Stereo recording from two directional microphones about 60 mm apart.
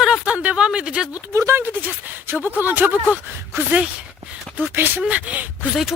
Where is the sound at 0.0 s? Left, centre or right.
Centre.